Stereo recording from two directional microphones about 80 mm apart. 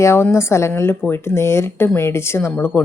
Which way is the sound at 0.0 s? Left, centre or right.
Left.